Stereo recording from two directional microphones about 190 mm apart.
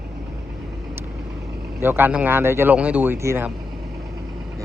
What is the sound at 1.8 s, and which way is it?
Speech, 10° right (ahead or behind).